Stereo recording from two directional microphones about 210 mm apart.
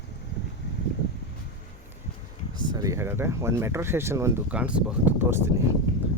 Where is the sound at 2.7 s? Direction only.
15° right (ahead or behind).